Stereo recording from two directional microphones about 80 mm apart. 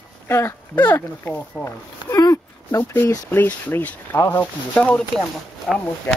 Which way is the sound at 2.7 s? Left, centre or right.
Left.